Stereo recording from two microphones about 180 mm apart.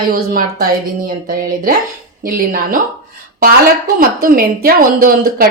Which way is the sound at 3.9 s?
55° right (ahead or behind).